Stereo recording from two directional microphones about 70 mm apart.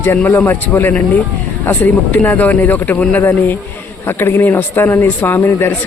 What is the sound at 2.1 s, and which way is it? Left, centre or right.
A man's voice, left.